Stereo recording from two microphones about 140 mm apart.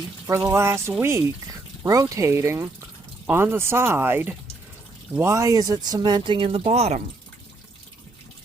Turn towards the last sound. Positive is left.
turn(degrees=-50)  # may be behind; listen again after turning